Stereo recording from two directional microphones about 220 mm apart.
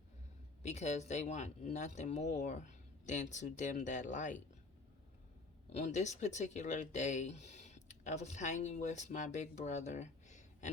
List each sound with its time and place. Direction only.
0.6 s speech: 30° left (ahead or behind)
5.7 s speech: 30° left (ahead or behind)